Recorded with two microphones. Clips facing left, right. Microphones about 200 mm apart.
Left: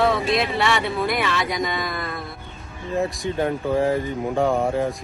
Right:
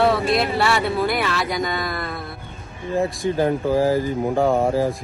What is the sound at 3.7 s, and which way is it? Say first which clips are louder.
Speech: right 1 dB; 30° right (ahead or behind).